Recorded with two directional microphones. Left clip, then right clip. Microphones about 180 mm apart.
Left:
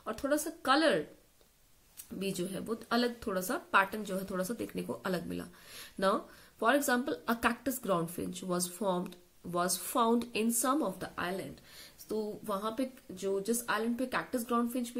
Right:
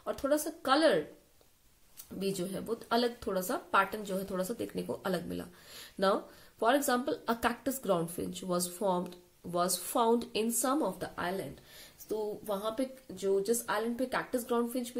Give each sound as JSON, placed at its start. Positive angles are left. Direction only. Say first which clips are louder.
{"t": 0.0, "sound": "speech", "louder": "right 2 dB", "side_deg": 15}
{"t": 2.1, "sound": "speech", "louder": "right 2 dB", "side_deg": 15}
{"t": 12.1, "sound": "speech", "louder": "right 1 dB", "side_deg": 25}